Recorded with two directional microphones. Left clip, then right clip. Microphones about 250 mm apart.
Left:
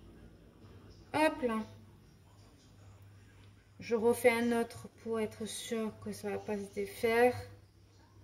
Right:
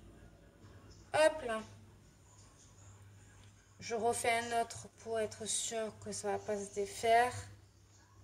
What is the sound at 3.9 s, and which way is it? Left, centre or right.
Speech, right.